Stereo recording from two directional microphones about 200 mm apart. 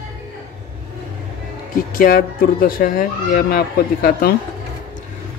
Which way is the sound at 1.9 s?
45° left (ahead or behind).